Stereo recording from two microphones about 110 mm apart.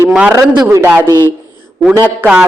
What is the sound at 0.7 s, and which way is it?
Speech, 25° right (ahead or behind).